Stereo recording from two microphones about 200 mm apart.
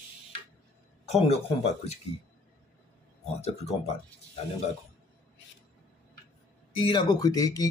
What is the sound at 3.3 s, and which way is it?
Speech, 35° left (ahead or behind).